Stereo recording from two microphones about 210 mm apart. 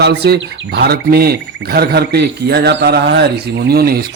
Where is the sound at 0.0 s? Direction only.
50° right (ahead or behind).